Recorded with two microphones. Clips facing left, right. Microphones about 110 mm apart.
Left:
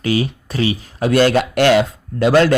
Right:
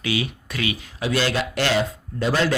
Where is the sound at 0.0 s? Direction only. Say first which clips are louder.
Left 7 dB; 40° left (ahead or behind).